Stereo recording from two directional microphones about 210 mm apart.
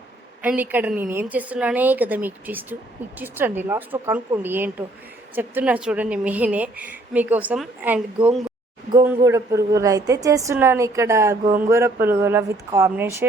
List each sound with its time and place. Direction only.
0.4 s a woman's voice: 10° right (ahead or behind)
8.9 s a woman's voice: 15° right (ahead or behind)